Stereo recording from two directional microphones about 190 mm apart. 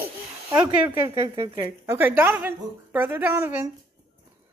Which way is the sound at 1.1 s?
30° right (ahead or behind).